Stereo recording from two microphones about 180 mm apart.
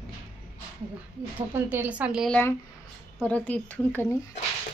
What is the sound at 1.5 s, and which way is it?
Speech, 10° right (ahead or behind).